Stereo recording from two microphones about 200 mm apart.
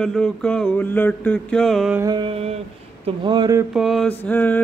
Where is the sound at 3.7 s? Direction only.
Centre (ahead or behind).